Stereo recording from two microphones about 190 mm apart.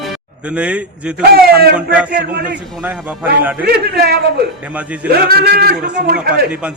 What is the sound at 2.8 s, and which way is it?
Speech, 10° right (ahead or behind).